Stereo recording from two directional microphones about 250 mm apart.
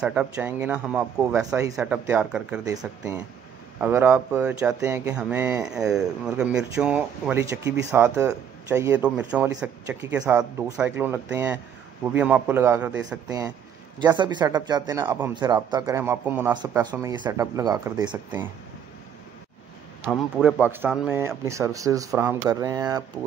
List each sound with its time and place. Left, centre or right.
0.0 s speech: centre
20.1 s speech: centre